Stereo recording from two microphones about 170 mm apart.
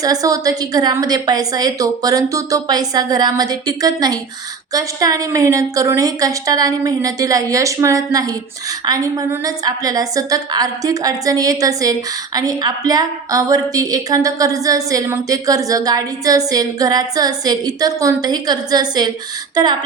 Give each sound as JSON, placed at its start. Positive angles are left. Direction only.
{"t": 0.0, "sound": "a woman's voice", "side_deg": -20}